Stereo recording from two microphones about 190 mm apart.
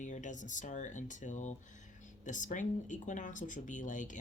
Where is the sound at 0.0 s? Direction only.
40° left (ahead or behind).